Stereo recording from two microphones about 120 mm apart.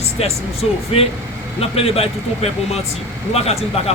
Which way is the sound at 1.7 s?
55° left (ahead or behind).